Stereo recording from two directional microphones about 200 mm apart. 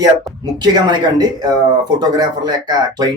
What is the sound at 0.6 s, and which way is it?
Speech, 20° right (ahead or behind).